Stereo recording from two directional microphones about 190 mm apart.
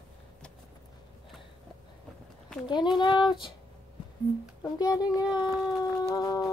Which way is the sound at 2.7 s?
25° left (ahead or behind).